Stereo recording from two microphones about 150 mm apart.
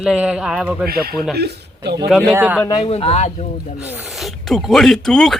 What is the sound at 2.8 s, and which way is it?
Speech, 40° left (ahead or behind).